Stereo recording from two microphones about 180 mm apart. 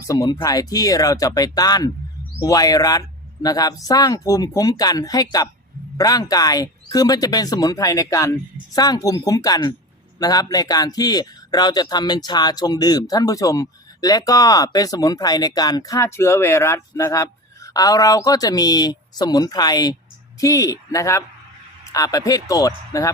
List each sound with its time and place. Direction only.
0.1 s a man's voice: 15° left (ahead or behind)